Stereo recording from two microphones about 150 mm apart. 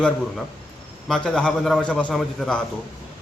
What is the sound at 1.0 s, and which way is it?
A man's voice, 5° left (ahead or behind).